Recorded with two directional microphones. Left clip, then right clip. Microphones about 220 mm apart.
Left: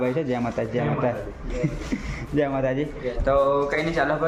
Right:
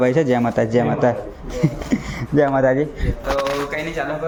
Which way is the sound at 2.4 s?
15° right (ahead or behind).